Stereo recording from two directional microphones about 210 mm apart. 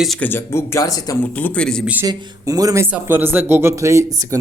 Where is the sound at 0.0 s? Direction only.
5° left (ahead or behind).